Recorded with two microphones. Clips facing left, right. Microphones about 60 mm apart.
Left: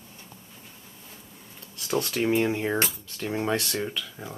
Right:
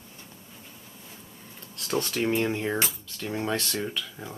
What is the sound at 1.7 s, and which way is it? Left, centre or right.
Speech, centre.